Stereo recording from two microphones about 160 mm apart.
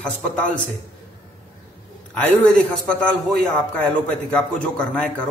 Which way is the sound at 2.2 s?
10° left (ahead or behind).